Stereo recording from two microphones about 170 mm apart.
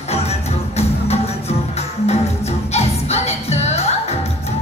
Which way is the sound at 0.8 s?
40° left (ahead or behind).